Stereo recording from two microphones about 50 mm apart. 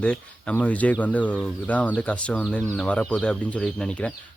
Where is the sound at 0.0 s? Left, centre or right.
Left.